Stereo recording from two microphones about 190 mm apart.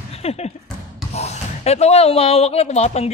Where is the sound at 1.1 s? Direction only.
35° left (ahead or behind).